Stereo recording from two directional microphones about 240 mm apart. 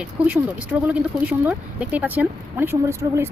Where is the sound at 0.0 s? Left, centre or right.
Centre.